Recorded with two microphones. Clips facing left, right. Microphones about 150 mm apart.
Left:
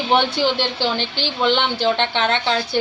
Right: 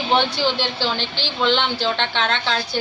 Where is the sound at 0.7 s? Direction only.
15° left (ahead or behind).